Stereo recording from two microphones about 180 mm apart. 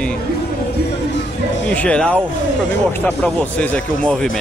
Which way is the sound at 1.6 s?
5° left (ahead or behind).